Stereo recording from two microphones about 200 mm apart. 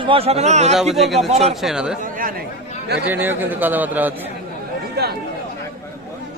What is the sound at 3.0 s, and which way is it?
A man's voice, 10° right (ahead or behind).